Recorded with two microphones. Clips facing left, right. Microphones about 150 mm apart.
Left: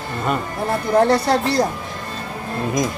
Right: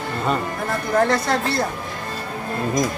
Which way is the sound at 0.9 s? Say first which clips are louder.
Left 3 dB; 30° left (ahead or behind).